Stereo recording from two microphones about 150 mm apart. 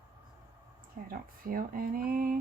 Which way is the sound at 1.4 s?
75° right (ahead or behind).